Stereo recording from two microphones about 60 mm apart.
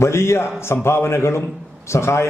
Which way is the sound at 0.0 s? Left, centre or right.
Left.